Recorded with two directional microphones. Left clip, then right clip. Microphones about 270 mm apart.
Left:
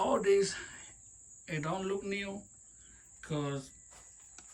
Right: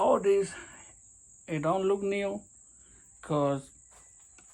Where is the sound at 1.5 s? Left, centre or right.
Centre.